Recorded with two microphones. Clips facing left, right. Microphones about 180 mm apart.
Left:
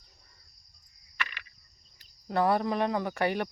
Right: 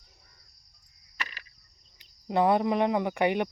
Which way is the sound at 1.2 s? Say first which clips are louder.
Left 1 dB; 35° right (ahead or behind).